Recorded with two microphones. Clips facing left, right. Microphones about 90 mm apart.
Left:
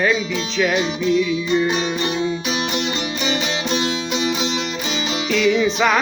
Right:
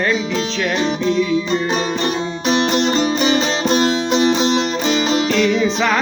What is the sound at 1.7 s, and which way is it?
Music, 45° right (ahead or behind).